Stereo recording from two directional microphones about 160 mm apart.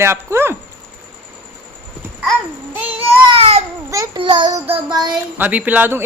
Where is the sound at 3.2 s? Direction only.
35° right (ahead or behind).